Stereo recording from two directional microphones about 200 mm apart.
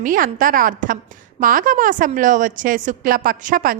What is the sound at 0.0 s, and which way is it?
A woman's voice, 45° right (ahead or behind).